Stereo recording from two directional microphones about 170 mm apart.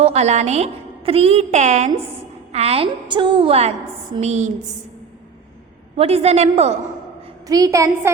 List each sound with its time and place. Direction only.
0.0 s a woman's voice: 40° right (ahead or behind)
6.0 s a woman's voice: 35° right (ahead or behind)
7.4 s a woman's voice: 20° right (ahead or behind)